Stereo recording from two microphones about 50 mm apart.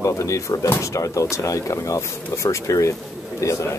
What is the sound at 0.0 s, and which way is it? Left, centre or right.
Speech, left.